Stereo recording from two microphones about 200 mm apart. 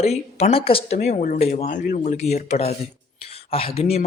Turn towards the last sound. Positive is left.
turn(degrees=30)  # may be behind; listen again after turning